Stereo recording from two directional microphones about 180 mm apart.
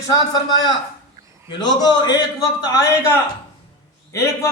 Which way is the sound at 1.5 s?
25° left (ahead or behind).